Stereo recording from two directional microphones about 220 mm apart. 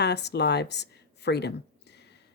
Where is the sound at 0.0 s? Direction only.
50° left (ahead or behind).